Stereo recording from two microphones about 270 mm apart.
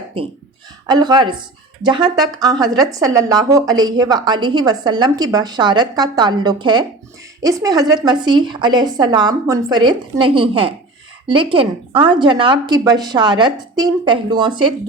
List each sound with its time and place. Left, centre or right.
0.9 s a woman's voice: centre